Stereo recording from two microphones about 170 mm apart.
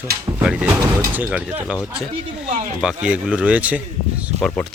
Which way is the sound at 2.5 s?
50° right (ahead or behind).